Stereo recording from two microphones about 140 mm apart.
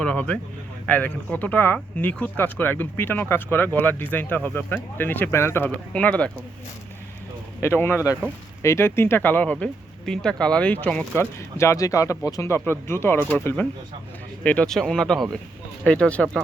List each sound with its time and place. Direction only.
0.0 s speech: 5° left (ahead or behind)
7.6 s speech: 15° left (ahead or behind)
11.3 s speech: 20° left (ahead or behind)